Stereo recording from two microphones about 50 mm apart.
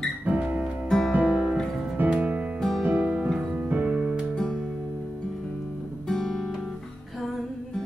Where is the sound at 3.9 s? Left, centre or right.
Right.